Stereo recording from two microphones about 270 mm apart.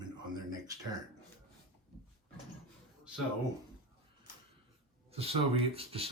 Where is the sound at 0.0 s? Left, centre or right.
Centre.